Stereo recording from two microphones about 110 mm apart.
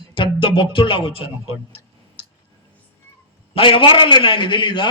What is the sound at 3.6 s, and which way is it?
A man's voice, 50° left (ahead or behind).